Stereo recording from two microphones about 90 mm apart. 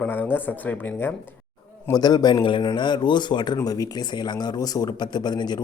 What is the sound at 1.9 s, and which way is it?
Speech, 50° left (ahead or behind).